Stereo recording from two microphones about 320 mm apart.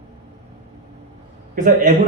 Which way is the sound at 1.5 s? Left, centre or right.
Right.